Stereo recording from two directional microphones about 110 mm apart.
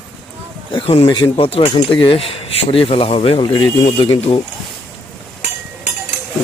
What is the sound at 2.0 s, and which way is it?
Speech, 60° left (ahead or behind).